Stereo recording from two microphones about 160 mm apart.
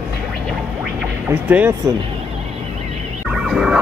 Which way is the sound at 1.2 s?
10° right (ahead or behind).